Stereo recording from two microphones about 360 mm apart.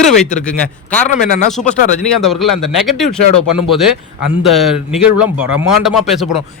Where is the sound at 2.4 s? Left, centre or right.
Left.